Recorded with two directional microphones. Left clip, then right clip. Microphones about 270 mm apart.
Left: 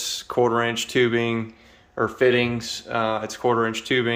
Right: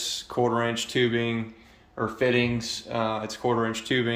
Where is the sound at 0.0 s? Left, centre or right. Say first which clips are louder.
Left 4 dB; centre.